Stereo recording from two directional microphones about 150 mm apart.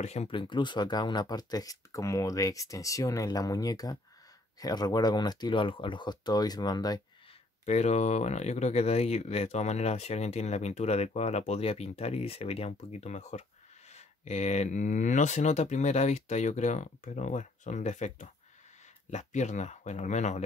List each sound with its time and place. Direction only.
0.0 s speech: 45° left (ahead or behind)
0.4 s speech: 30° left (ahead or behind)
7.6 s speech: 50° left (ahead or behind)